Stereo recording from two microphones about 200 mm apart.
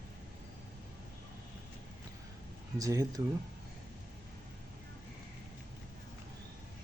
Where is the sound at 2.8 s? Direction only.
15° right (ahead or behind).